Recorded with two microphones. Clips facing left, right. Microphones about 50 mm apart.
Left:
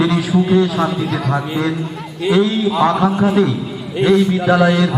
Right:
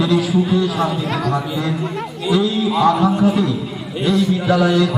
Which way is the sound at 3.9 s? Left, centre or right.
Left.